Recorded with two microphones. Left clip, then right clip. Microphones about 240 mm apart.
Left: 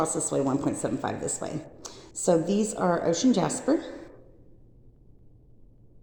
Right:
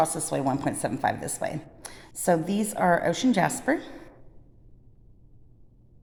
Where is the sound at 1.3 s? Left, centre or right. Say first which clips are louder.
Right 2 dB; right.